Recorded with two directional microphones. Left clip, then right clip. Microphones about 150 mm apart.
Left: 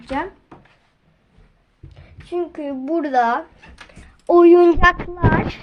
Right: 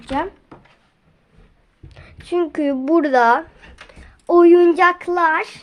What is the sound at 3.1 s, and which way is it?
Speech, 35° right (ahead or behind).